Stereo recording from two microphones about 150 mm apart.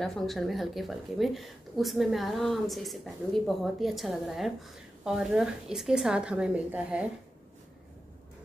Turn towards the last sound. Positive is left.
turn(degrees=-5)  # may be behind; listen again after turning